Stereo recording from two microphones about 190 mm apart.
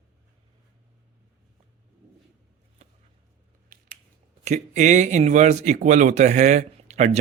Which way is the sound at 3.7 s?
50° right (ahead or behind).